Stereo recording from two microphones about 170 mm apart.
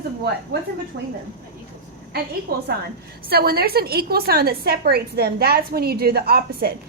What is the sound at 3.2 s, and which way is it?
A woman's voice, 65° right (ahead or behind).